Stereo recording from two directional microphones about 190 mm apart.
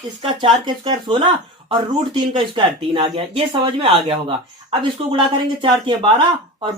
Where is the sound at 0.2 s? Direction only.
25° right (ahead or behind).